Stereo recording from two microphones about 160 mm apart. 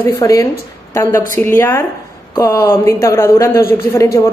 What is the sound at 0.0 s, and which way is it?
Speech, 20° left (ahead or behind).